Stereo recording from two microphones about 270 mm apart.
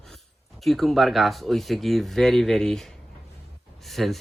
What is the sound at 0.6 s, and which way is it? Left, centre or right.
Speech, centre.